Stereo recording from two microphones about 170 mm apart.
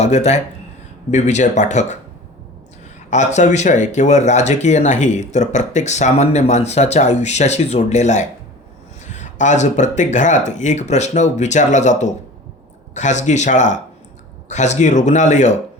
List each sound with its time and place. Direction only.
0.0 s speech: 40° left (ahead or behind)
3.1 s speech: 45° left (ahead or behind)